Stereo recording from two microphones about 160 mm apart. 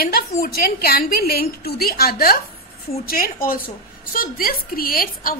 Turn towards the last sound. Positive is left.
turn(degrees=65)  # may be behind; listen again after turning